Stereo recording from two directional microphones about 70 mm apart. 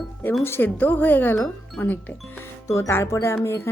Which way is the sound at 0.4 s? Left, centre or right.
Left.